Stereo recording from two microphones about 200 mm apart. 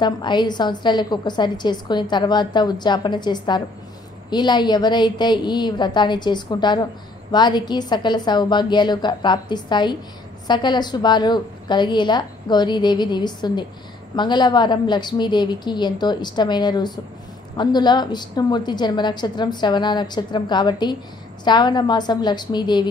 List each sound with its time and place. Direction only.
0.0 s a woman's voice: 20° left (ahead or behind)